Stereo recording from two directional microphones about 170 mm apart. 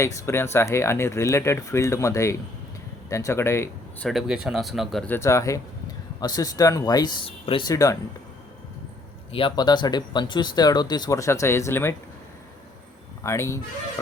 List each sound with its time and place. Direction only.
0.0 s speech: 15° left (ahead or behind)
4.1 s speech: 5° right (ahead or behind); by 7.7 s 30° left (ahead or behind)
7.7 s speech: 20° left (ahead or behind)
9.3 s speech: 30° left (ahead or behind)
13.2 s speech: 15° left (ahead or behind)